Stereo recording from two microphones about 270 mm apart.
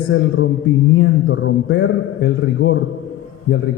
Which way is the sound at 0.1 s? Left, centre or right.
Left.